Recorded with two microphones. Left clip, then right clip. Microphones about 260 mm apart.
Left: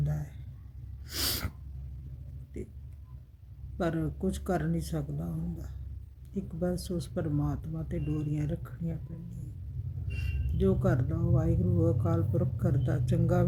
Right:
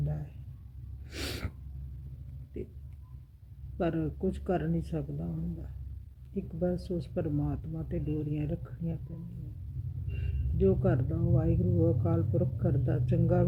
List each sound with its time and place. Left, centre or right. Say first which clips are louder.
0.0 s a sound: left 2 dB; centre
1.0 s sneeze: left 6 dB; centre
3.8 s speech: even; centre
6.3 s speech: right 1 dB; centre
10.6 s speech: right 1 dB; centre